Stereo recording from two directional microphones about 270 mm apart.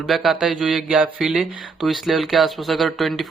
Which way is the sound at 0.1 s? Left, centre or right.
Centre.